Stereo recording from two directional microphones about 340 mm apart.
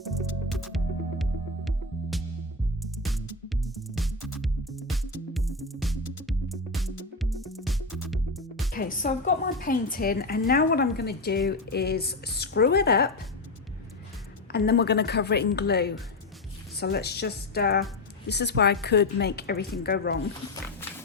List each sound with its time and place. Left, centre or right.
0.0 s music: centre
8.7 s a woman's voice: left
14.5 s a woman's voice: left